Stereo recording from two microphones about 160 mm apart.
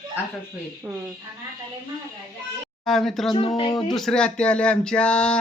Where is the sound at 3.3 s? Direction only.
35° left (ahead or behind).